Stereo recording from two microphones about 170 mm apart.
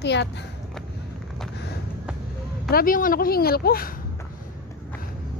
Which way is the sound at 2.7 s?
55° left (ahead or behind).